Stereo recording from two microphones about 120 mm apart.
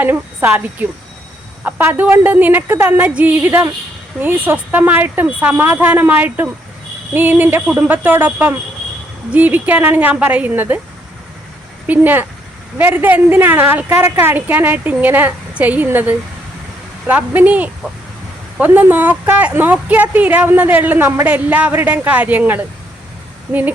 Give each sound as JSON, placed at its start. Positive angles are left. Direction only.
{"t": 0.0, "sound": "speech", "side_deg": -15}
{"t": 11.9, "sound": "speech", "side_deg": -15}